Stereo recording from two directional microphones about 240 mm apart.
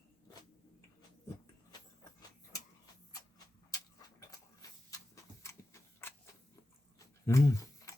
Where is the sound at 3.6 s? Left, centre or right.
Centre.